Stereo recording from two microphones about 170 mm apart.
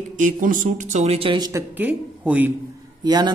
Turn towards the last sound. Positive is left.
turn(degrees=-25)  # may be behind; listen again after turning